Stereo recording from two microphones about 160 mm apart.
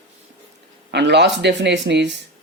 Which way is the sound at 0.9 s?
90° right.